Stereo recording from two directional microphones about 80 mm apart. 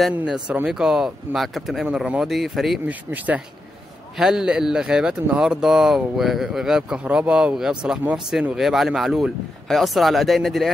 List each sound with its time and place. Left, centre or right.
0.5 s speech: centre
2.9 s speech: centre
4.2 s speech: centre